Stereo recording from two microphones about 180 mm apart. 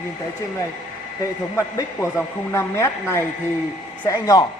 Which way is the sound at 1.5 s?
15° left (ahead or behind).